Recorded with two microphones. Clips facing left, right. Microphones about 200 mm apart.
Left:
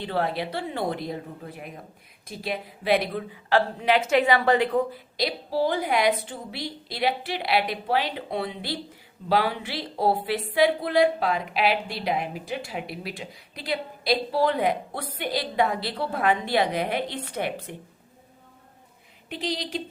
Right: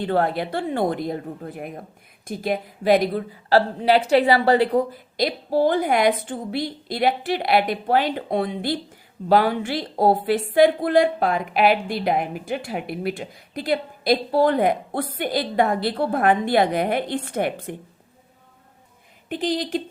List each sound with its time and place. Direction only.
0.0 s a woman's voice: 50° right (ahead or behind)
5.1 s a woman's voice: 50° right (ahead or behind)
19.3 s a woman's voice: 50° right (ahead or behind)